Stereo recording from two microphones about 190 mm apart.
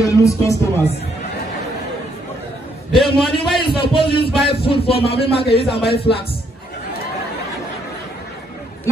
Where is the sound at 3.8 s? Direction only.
25° left (ahead or behind).